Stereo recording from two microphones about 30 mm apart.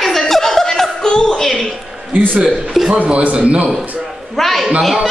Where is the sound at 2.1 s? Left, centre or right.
Right.